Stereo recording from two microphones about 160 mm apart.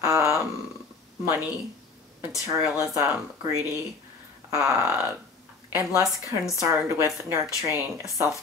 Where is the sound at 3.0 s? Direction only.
15° right (ahead or behind).